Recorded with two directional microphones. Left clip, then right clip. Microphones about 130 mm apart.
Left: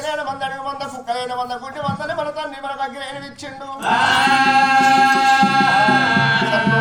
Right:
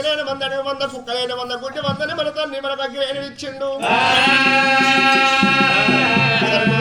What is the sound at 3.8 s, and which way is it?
Music, 15° left (ahead or behind).